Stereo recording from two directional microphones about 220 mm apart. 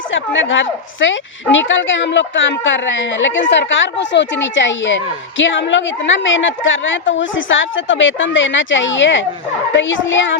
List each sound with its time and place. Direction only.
0.1 s a woman's voice: 60° left (ahead or behind)